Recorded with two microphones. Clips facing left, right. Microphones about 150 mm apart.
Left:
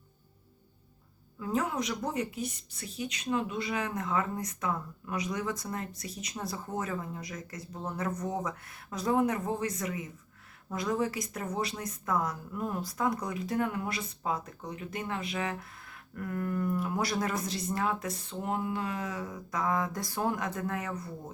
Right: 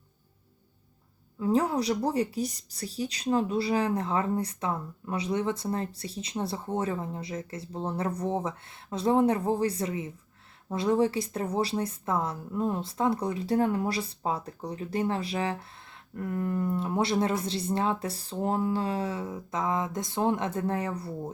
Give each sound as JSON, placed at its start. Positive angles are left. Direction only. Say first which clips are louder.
{"t": 1.4, "sound": "a woman's voice", "louder": "right 6 dB", "side_deg": -30}